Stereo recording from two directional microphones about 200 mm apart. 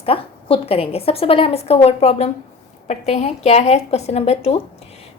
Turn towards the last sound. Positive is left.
turn(degrees=30)  # may be behind; listen again after turning